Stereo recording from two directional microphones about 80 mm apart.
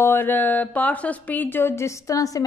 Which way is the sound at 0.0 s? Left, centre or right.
Left.